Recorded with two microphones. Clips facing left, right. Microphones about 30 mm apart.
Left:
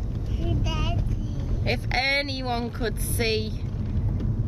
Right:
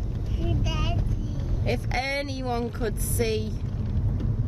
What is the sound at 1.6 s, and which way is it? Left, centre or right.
Speech, left.